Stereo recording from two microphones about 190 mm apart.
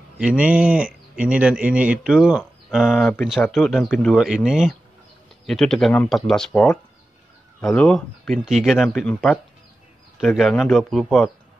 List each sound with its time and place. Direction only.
0.2 s speech: 5° right (ahead or behind)